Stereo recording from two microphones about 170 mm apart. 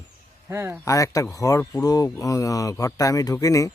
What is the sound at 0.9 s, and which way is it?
Speech, 20° left (ahead or behind).